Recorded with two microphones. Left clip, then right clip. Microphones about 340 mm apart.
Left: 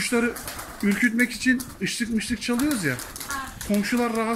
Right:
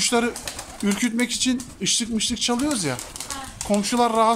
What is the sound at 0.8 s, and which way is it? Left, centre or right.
Speech, right.